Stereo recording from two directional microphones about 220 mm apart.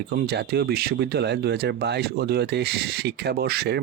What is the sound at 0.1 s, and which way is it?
Speech, 45° right (ahead or behind).